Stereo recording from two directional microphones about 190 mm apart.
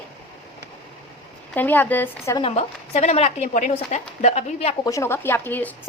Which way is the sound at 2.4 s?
35° left (ahead or behind).